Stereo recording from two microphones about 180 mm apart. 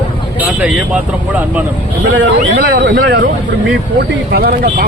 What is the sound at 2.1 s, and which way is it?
Speech, 70° right (ahead or behind).